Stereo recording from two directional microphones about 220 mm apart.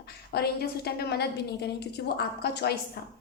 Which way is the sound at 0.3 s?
45° left (ahead or behind).